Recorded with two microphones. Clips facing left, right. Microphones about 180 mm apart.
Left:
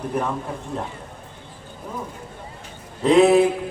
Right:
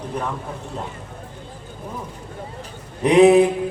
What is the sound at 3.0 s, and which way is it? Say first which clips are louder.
Speech: right 2 dB; 15° right (ahead or behind).